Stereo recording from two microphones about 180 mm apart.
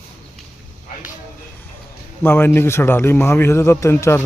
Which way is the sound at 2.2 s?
10° left (ahead or behind).